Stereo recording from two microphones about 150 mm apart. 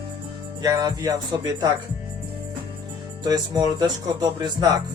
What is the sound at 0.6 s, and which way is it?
Speech, 25° right (ahead or behind).